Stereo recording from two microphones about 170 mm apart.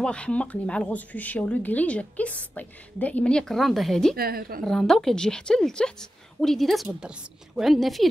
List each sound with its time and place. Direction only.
0.0 s speech: 5° left (ahead or behind)
4.2 s a woman's voice: 60° right (ahead or behind)
4.6 s a woman's voice: centre (ahead or behind)